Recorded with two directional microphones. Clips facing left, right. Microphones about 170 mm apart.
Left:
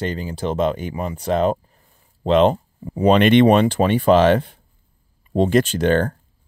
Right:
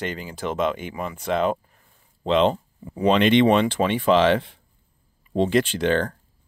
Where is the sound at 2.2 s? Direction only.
50° left (ahead or behind).